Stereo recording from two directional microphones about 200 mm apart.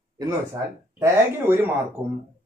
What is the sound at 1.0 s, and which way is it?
Speech, 10° right (ahead or behind).